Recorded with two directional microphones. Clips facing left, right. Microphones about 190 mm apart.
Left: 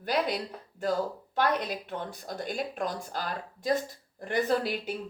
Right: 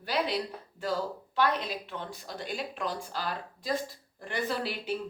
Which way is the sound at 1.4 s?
50° left (ahead or behind).